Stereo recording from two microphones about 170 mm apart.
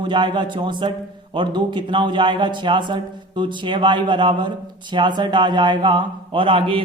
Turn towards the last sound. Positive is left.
turn(degrees=-30)  # may be behind; listen again after turning